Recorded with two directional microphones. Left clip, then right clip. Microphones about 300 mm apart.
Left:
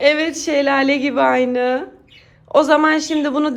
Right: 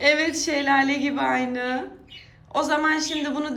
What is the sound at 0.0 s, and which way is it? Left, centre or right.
A woman's voice, centre.